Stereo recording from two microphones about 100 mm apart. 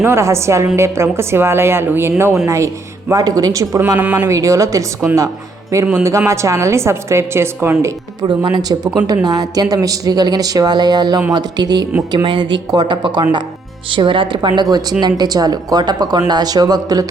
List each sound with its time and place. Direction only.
0.0 s a woman's voice: 30° right (ahead or behind)
3.1 s speech: 35° right (ahead or behind)
3.9 s speech: 15° right (ahead or behind)
4.3 s a woman's voice: 30° right (ahead or behind)
8.2 s speech: 45° right (ahead or behind)